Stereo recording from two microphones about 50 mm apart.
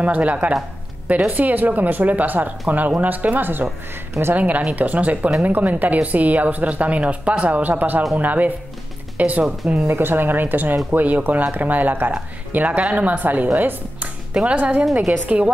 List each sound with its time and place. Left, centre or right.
0.0 s speech: right
9.8 s speech: right